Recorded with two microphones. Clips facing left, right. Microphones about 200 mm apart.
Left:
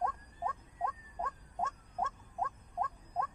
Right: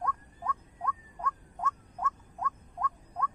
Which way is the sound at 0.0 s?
25° left (ahead or behind).